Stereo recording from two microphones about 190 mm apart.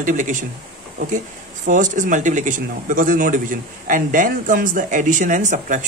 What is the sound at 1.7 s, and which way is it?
A man's voice, 40° right (ahead or behind).